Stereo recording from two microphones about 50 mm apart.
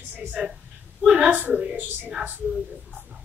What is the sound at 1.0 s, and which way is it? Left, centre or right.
Speech, centre.